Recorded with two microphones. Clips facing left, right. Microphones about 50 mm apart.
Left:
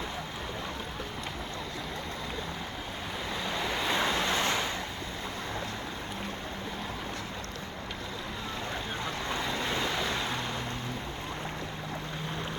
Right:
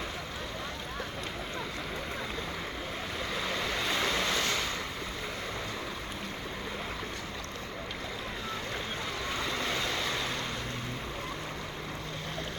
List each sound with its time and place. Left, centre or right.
3.9 s waves: centre
4.4 s vehicle: left